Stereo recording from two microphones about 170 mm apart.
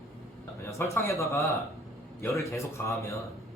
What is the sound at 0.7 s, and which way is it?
Speech, 15° left (ahead or behind).